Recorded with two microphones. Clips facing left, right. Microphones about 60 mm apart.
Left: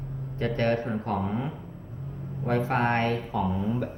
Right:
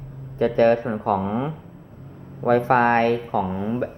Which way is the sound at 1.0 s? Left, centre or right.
Right.